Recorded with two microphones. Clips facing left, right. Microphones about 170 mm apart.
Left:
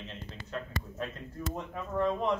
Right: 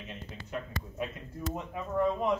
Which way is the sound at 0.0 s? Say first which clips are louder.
Even; 10° right (ahead or behind).